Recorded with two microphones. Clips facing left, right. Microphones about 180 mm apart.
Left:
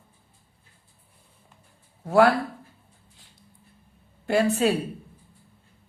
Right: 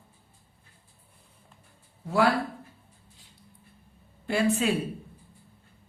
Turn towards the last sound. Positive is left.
turn(degrees=40)  # may be behind; listen again after turning